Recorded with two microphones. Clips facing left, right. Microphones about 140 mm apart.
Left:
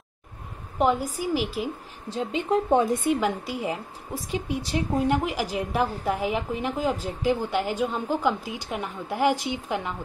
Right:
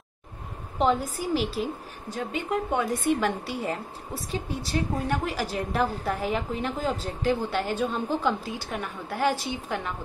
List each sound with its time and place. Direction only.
0.7 s a woman's voice: 10° left (ahead or behind)
2.0 s a woman's voice: 25° left (ahead or behind)
2.9 s a woman's voice: 15° left (ahead or behind)